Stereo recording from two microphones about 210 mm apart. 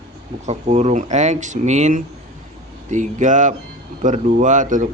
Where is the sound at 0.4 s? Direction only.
35° right (ahead or behind).